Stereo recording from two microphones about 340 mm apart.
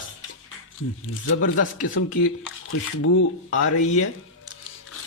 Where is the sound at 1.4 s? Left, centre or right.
Left.